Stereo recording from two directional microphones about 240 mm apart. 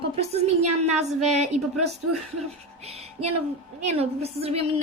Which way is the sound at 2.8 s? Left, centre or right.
Right.